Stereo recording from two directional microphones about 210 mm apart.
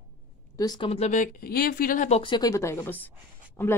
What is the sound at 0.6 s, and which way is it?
Speech, 20° left (ahead or behind).